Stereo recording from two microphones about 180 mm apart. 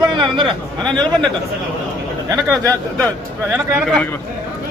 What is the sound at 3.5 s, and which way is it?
Speech, centre (ahead or behind).